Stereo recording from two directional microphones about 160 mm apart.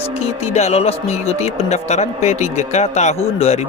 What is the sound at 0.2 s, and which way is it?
Speech, 40° left (ahead or behind).